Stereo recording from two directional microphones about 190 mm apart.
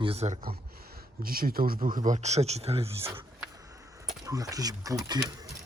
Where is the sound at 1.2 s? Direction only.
50° right (ahead or behind); by 3.3 s 30° right (ahead or behind).